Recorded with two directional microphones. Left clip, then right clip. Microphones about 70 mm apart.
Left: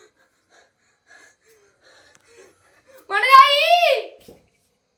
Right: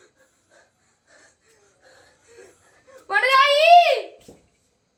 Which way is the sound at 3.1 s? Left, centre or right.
Centre.